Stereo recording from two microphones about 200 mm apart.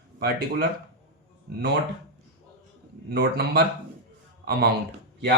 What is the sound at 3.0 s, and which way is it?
A man's voice, 55° right (ahead or behind).